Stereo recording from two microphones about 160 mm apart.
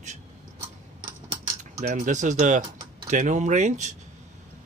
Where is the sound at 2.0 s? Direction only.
50° right (ahead or behind).